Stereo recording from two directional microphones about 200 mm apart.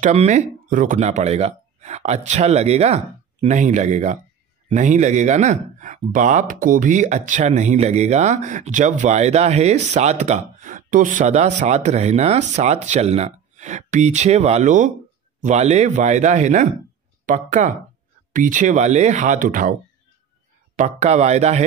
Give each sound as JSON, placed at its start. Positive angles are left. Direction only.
{"t": 0.0, "sound": "speech", "side_deg": -35}
{"t": 20.7, "sound": "speech", "side_deg": -35}